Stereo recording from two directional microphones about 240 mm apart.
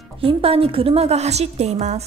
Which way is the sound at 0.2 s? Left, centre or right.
Right.